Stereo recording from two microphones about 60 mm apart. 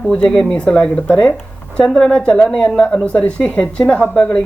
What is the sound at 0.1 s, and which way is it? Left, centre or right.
Speech, centre.